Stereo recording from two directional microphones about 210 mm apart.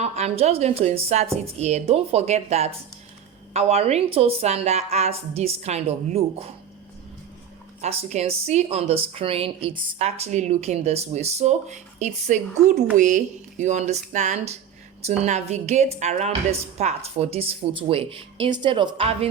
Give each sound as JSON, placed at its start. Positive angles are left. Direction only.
{"t": 0.0, "sound": "a woman's voice", "side_deg": -30}
{"t": 7.8, "sound": "a woman's voice", "side_deg": -30}